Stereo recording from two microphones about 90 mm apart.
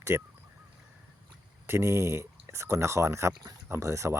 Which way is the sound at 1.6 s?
30° right (ahead or behind).